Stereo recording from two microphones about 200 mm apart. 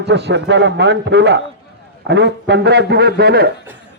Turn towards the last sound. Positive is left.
turn(degrees=-50)  # may be behind; listen again after turning